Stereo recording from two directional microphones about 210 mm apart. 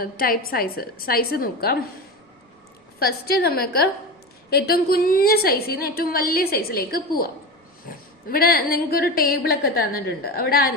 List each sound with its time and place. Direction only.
0.0 s a woman's voice: 45° left (ahead or behind)
3.0 s a woman's voice: 45° left (ahead or behind)